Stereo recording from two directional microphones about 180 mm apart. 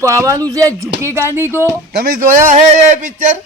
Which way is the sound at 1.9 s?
55° right (ahead or behind).